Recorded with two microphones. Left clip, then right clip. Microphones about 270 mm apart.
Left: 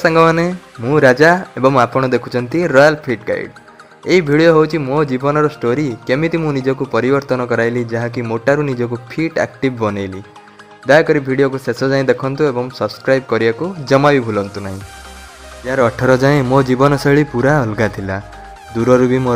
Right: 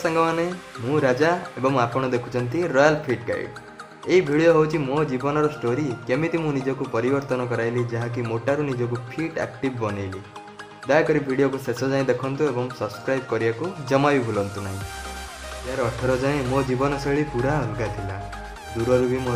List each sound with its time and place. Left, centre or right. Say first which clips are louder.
0.1 s speech: left 10 dB; left
15.8 s speech: left 11 dB; left